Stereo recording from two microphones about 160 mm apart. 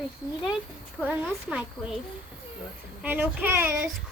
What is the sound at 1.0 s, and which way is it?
Speech, 10° right (ahead or behind).